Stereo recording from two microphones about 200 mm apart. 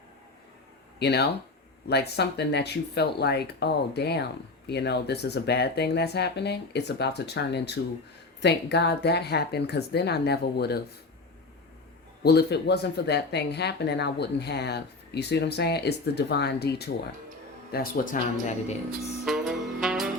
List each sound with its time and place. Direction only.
0.9 s speech: 55° left (ahead or behind)
12.2 s speech: 55° left (ahead or behind)
19.2 s music: centre (ahead or behind)